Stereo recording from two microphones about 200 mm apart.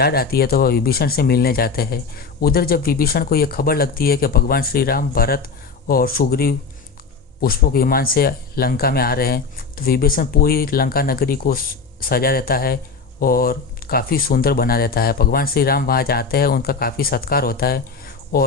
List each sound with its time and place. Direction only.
0.0 s speech: 50° left (ahead or behind)